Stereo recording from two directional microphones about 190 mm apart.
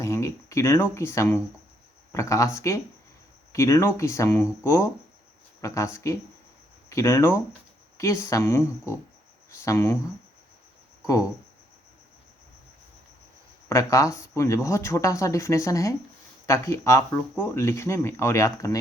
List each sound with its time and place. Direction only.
0.0 s speech: 15° left (ahead or behind)
13.7 s speech: 15° left (ahead or behind)